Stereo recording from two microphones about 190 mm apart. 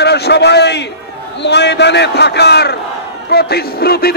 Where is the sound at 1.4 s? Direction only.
65° left (ahead or behind).